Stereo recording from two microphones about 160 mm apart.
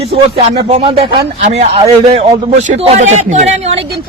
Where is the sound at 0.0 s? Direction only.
40° right (ahead or behind).